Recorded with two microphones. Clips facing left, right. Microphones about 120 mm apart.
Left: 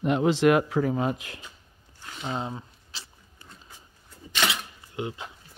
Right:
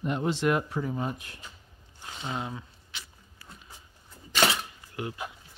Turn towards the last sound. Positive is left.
turn(degrees=25)  # may be behind; listen again after turning